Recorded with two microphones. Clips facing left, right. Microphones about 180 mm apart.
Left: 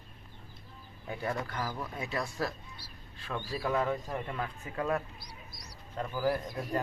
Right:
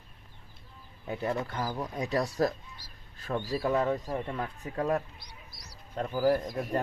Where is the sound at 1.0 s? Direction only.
25° right (ahead or behind).